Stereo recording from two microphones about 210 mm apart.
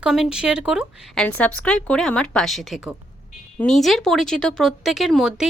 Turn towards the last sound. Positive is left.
turn(degrees=0)  # may be behind; listen again after turning